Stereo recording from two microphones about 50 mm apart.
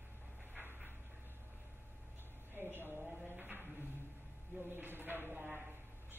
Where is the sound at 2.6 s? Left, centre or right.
Right.